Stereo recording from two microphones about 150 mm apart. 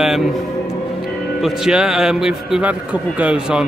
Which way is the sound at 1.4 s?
Centre (ahead or behind).